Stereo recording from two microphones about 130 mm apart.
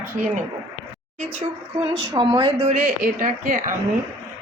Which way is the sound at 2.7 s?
75° right (ahead or behind).